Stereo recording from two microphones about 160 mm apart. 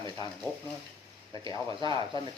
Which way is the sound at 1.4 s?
30° right (ahead or behind).